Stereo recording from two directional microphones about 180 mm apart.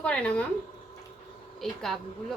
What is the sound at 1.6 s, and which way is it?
Speech, centre (ahead or behind).